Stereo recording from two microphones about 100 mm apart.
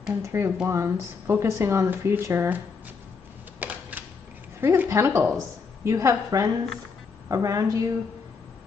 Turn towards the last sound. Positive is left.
turn(degrees=-35)  # may be behind; listen again after turning